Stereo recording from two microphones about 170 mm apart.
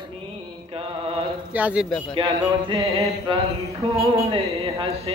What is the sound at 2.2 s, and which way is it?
Music, 30° right (ahead or behind).